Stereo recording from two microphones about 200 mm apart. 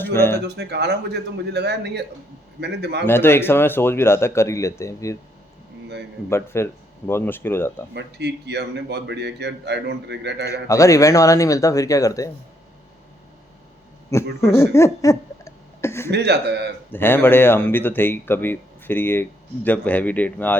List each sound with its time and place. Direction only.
0.0 s a sound: 10° left (ahead or behind)
0.4 s a man's voice: 55° right (ahead or behind)
3.1 s speech: 10° left (ahead or behind)
6.3 s speech: 15° left (ahead or behind)
7.9 s a man's voice: 55° right (ahead or behind)
10.7 s speech: 15° left (ahead or behind)
14.1 s speech: 15° left (ahead or behind)
16.1 s a man's voice: 55° right (ahead or behind)
16.9 s speech: 10° left (ahead or behind)